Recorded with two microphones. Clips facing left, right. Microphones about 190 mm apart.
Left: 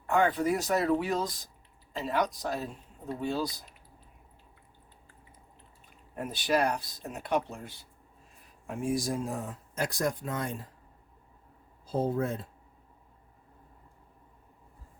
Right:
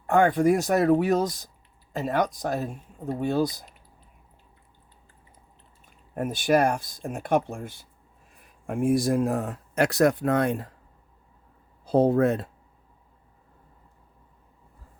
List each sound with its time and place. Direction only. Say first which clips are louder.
0.1 s speech: right 6 dB; 50° right (ahead or behind)
6.1 s speech: right 6 dB; 50° right (ahead or behind); by 10.7 s 65° right (ahead or behind)
11.9 s speech: right 9 dB; 70° right (ahead or behind)